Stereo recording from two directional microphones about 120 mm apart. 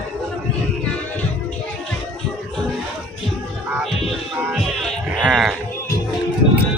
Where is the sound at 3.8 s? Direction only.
Centre (ahead or behind).